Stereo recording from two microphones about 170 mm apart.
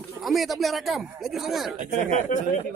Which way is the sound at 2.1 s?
45° left (ahead or behind).